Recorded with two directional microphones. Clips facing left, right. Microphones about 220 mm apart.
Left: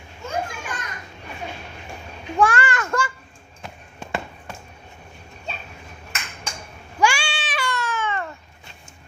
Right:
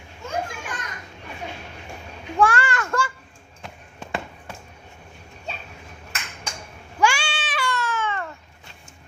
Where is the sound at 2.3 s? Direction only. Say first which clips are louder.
Left 1 dB; 20° left (ahead or behind).